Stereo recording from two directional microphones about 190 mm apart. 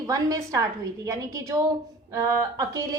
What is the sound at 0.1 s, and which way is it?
A woman's voice, 20° right (ahead or behind).